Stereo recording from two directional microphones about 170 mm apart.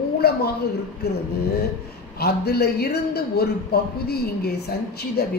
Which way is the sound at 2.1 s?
70° left (ahead or behind).